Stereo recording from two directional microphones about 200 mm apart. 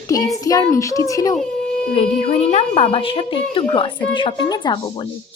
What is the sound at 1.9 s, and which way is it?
A woman's voice, 30° left (ahead or behind).